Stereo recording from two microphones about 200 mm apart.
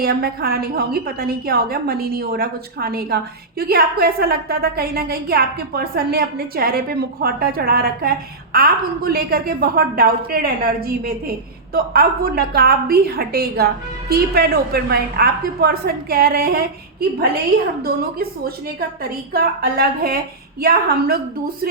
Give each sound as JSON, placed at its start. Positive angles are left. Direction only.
{"t": 0.0, "sound": "a woman's voice", "side_deg": -50}
{"t": 17.8, "sound": "a woman's voice", "side_deg": -50}